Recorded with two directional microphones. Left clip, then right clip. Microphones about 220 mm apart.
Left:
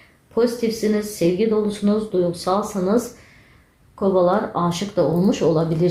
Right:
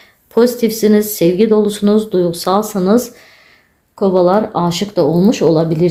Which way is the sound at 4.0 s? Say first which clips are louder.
Right 6 dB; 45° right (ahead or behind).